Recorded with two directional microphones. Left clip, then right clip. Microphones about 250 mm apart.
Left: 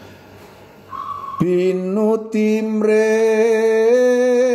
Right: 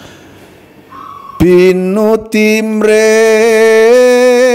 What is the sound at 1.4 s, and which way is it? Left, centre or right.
Mantra, right.